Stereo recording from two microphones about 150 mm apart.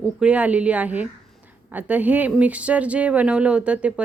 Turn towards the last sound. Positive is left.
turn(degrees=-10)  # may be behind; listen again after turning